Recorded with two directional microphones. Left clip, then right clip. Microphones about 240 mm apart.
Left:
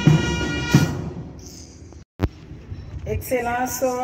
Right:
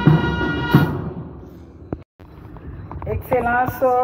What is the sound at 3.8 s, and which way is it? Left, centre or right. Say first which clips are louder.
Speech: right 6 dB; left.